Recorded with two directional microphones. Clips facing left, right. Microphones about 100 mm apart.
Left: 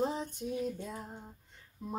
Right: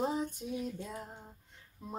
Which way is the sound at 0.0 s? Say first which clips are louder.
Even; 5° right (ahead or behind).